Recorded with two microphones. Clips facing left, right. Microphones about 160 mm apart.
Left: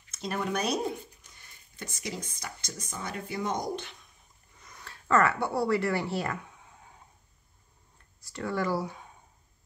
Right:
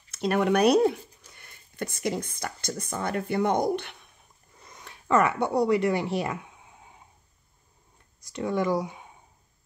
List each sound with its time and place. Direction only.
0.1 s speech: 65° right (ahead or behind)
4.6 s a sound: 25° right (ahead or behind)
8.2 s speech: 20° right (ahead or behind)